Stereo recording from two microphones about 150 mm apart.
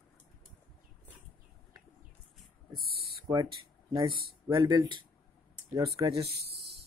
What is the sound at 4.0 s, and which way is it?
Speech, 25° right (ahead or behind).